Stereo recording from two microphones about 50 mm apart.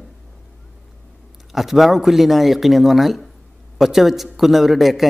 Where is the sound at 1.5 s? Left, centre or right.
Centre.